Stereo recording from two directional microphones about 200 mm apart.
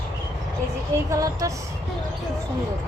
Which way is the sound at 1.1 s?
15° right (ahead or behind).